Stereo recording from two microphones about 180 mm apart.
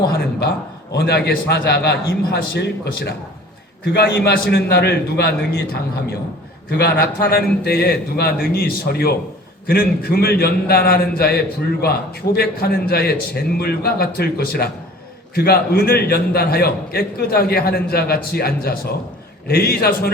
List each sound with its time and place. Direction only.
0.9 s a man's voice: 60° left (ahead or behind)
4.5 s a man's voice: 65° left (ahead or behind)